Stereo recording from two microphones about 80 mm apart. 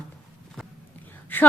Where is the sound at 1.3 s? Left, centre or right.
Left.